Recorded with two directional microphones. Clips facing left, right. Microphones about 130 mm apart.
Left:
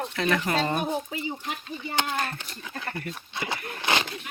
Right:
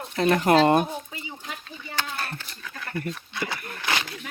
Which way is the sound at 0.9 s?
75° left (ahead or behind).